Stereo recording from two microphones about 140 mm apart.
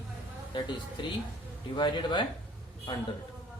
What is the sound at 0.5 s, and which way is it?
Speech, 35° left (ahead or behind).